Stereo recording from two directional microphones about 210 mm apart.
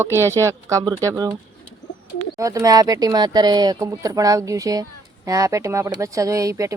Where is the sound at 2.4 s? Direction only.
15° right (ahead or behind).